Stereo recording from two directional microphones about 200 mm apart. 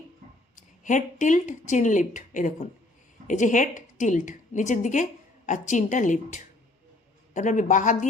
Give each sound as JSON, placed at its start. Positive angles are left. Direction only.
{"t": 0.9, "sound": "a woman's voice", "side_deg": 40}